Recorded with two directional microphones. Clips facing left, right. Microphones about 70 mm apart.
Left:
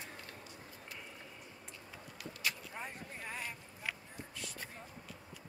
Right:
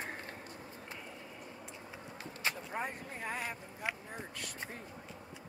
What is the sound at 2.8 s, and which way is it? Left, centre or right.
Speech, right.